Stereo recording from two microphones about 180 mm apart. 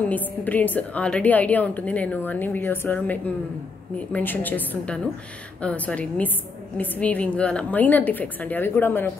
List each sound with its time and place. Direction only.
0.0 s a woman's voice: 10° left (ahead or behind)